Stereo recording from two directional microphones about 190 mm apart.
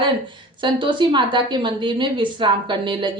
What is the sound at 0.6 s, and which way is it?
A woman's voice, 25° right (ahead or behind).